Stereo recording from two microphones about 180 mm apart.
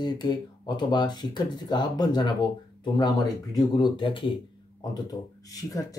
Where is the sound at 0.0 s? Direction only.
25° left (ahead or behind).